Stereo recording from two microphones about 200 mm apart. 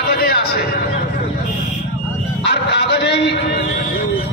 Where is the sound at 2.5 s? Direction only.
55° left (ahead or behind).